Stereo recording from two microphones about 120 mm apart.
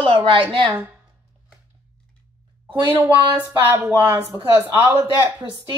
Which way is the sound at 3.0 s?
15° right (ahead or behind).